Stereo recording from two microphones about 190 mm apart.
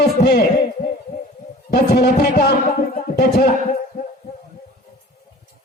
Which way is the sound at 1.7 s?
55° left (ahead or behind).